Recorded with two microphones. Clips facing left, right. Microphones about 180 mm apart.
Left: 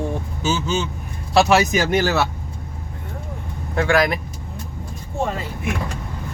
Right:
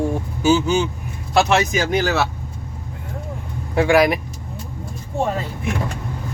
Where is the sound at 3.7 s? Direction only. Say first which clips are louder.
Right 3 dB; 15° right (ahead or behind).